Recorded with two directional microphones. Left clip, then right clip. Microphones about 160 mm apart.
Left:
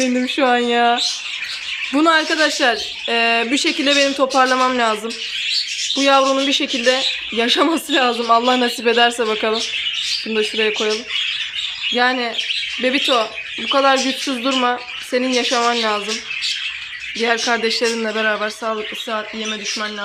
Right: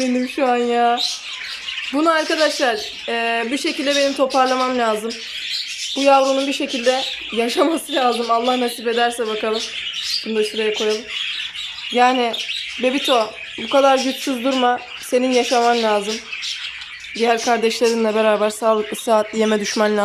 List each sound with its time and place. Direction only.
0.0 s speech: 5° right (ahead or behind)
6.0 s speech: 5° right (ahead or behind)
11.9 s speech: 15° right (ahead or behind)
17.3 s speech: 5° right (ahead or behind)
17.6 s speech: 15° right (ahead or behind)
19.0 s speech: 40° right (ahead or behind)